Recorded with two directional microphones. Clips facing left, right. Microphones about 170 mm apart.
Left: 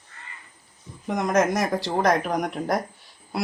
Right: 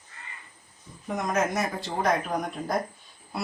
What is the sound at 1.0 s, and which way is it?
Speech, 75° left (ahead or behind).